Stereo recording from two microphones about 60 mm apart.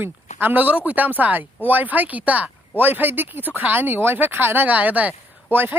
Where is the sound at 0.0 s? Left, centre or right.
Right.